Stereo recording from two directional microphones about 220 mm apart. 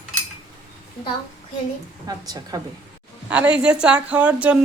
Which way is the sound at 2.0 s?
15° right (ahead or behind).